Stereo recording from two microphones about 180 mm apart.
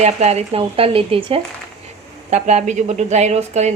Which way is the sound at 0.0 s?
35° right (ahead or behind).